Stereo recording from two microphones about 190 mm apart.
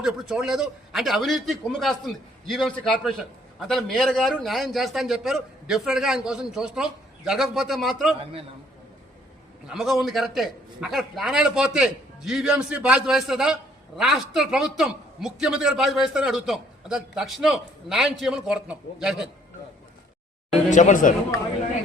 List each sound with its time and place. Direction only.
0.0 s a man's voice: centre (ahead or behind)
8.2 s a man's voice: 30° right (ahead or behind)
9.6 s a man's voice: centre (ahead or behind)
20.7 s speech: 40° left (ahead or behind)